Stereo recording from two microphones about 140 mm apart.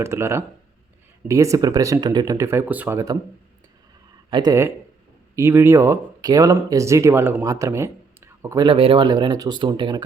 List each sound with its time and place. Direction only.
0.0 s speech: 20° right (ahead or behind)
4.3 s speech: 35° right (ahead or behind)
5.4 s speech: 20° right (ahead or behind)
8.6 s speech: 40° right (ahead or behind)